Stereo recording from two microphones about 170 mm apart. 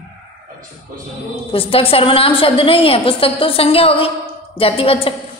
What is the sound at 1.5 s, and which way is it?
A woman's voice, 35° left (ahead or behind).